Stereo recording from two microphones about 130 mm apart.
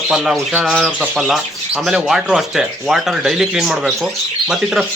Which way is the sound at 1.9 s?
5° right (ahead or behind).